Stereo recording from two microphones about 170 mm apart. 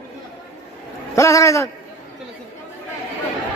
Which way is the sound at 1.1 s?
15° left (ahead or behind).